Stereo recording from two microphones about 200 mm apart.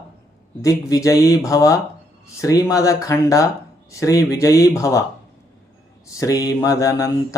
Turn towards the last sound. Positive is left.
turn(degrees=15)  # may be behind; listen again after turning